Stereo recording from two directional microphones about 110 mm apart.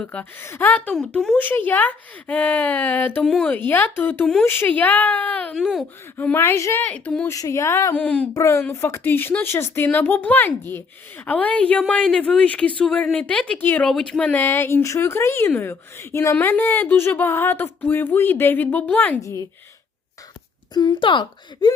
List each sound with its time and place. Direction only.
0.0 s speech: 10° left (ahead or behind)
3.2 s speech: 5° left (ahead or behind)
3.5 s speech: 15° left (ahead or behind)
6.1 s speech: 20° left (ahead or behind)
6.8 s speech: 10° left (ahead or behind)
7.3 s speech: 30° left (ahead or behind)
7.9 s speech: 10° left (ahead or behind)
8.3 s speech: 25° left (ahead or behind)
13.8 s speech: 5° left (ahead or behind)
19.2 s speech: 30° left (ahead or behind)
20.7 s speech: 40° left (ahead or behind)